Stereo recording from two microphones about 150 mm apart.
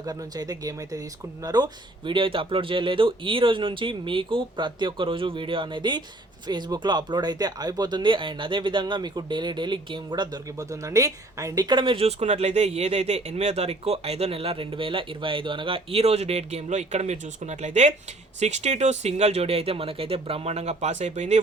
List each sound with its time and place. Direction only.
0.0 s speech: 25° right (ahead or behind); by 21.4 s 50° right (ahead or behind)